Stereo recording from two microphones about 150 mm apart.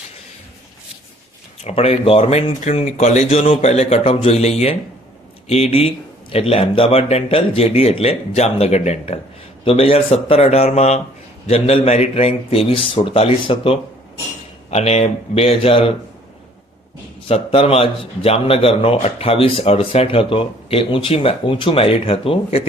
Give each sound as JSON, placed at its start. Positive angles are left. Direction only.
{"t": 1.6, "sound": "a man's voice", "side_deg": 40}
{"t": 17.2, "sound": "a man's voice", "side_deg": 40}